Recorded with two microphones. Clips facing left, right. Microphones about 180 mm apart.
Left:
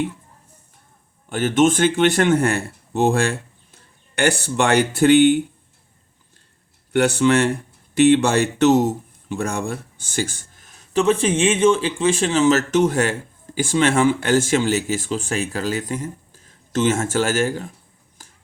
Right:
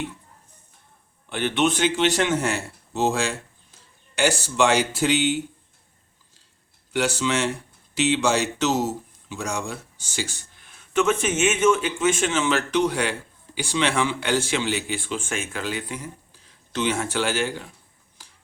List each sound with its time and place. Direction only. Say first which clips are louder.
1.3 s speech: left 6 dB; 45° left (ahead or behind)
6.9 s speech: left 7 dB; 60° left (ahead or behind)
18.2 s a sound: left 4 dB; 50° left (ahead or behind)